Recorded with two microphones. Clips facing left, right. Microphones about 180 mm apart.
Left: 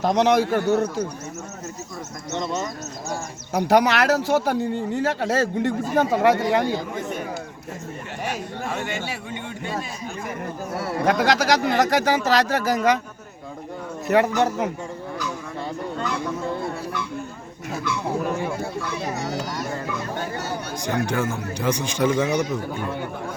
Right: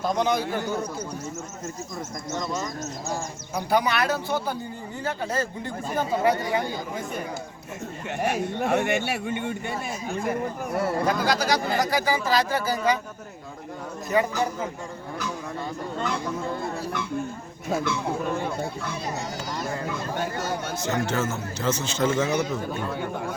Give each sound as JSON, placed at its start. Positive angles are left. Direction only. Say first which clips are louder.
{"t": 0.0, "sound": "a man's voice", "louder": "left 6 dB", "side_deg": 80}
{"t": 3.5, "sound": "speech", "louder": "left 6 dB", "side_deg": 80}
{"t": 8.5, "sound": "speech", "louder": "right 5 dB", "side_deg": -65}
{"t": 11.0, "sound": "speech", "louder": "left 4 dB", "side_deg": 70}
{"t": 14.1, "sound": "a man's voice", "louder": "left 5 dB", "side_deg": 75}
{"t": 20.8, "sound": "a man's voice", "louder": "left 3 dB", "side_deg": 15}